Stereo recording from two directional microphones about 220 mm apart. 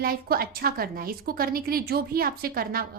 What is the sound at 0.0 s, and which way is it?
A woman's voice, 45° right (ahead or behind).